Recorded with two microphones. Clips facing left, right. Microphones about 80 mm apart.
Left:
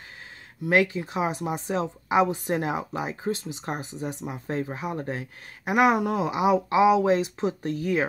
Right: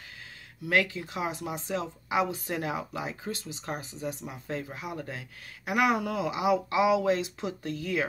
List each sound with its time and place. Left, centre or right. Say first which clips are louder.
0.7 s speech: left 5 dB; left